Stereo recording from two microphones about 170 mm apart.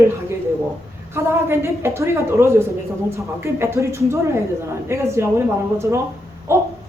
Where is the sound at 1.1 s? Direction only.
15° right (ahead or behind).